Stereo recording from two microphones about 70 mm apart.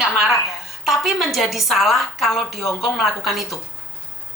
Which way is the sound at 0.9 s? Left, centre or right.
Centre.